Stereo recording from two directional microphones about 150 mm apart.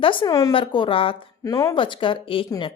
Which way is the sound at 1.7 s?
35° left (ahead or behind).